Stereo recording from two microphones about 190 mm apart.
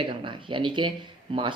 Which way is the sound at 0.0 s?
25° right (ahead or behind).